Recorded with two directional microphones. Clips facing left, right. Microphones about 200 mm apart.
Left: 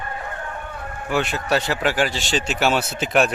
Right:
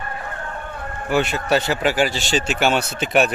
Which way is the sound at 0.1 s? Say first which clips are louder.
Even; 20° left (ahead or behind).